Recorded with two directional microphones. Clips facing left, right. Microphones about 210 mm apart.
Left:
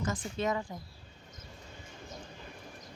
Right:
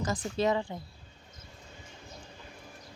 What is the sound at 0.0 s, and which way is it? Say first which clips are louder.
Speech: right 4 dB; 35° right (ahead or behind).